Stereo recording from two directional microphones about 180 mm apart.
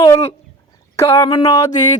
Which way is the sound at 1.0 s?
15° left (ahead or behind).